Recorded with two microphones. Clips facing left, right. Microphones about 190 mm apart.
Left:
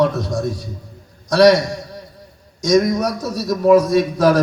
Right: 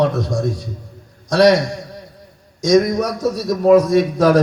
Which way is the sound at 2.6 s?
50° right (ahead or behind).